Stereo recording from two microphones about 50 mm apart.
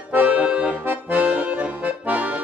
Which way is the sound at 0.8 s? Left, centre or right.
Right.